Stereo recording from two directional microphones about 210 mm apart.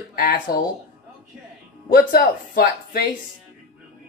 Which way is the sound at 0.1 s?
45° left (ahead or behind).